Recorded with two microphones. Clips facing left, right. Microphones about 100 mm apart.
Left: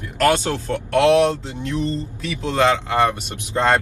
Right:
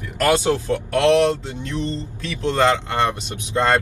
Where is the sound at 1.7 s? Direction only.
10° left (ahead or behind).